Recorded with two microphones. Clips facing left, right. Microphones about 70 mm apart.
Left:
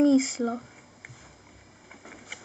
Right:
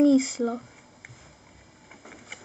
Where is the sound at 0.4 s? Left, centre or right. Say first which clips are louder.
Right 1 dB; centre.